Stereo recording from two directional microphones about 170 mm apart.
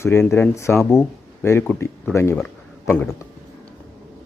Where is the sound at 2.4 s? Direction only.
5° left (ahead or behind).